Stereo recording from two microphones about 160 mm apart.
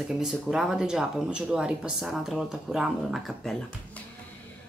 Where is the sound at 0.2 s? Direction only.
5° right (ahead or behind).